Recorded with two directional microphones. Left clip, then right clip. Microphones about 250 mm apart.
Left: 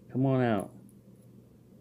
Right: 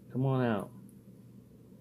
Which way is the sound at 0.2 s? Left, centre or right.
Left.